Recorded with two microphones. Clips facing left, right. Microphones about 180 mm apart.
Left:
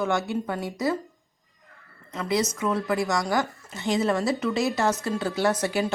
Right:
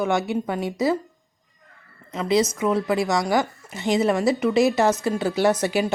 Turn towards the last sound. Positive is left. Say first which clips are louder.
# right 4 dB
turn(degrees=-20)  # may be behind; listen again after turning